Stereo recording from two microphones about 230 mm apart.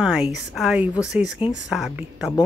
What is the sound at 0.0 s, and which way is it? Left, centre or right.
Speech, centre.